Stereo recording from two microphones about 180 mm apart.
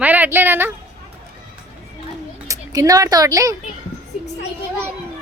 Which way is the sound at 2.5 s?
20° right (ahead or behind).